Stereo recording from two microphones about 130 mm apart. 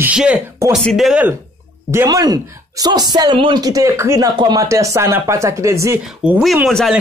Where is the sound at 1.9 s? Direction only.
25° right (ahead or behind).